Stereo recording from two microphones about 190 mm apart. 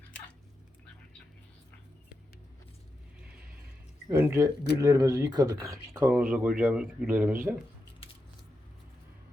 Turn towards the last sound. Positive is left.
turn(degrees=-10)  # may be behind; listen again after turning